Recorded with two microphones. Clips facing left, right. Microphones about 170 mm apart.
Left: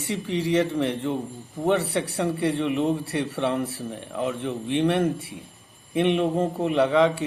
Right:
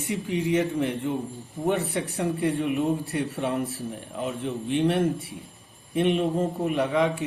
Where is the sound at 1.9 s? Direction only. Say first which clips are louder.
Left 2 dB; 75° left (ahead or behind).